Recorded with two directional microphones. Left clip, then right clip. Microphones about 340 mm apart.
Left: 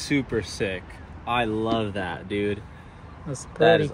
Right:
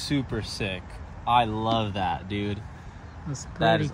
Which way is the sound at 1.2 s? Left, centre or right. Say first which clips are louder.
Right 2 dB; centre.